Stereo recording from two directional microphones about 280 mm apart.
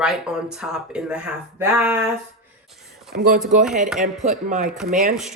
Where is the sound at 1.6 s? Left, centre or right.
Centre.